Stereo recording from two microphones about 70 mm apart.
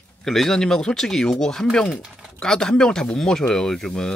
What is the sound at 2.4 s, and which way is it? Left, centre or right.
Speech, centre.